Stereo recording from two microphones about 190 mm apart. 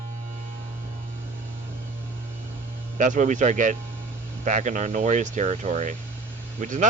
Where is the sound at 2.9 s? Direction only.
40° right (ahead or behind).